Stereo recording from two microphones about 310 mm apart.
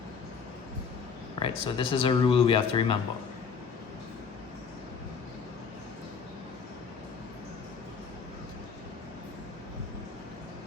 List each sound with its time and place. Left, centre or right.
1.4 s speech: centre